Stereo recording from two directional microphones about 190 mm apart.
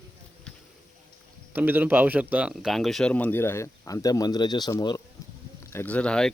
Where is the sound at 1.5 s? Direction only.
10° right (ahead or behind).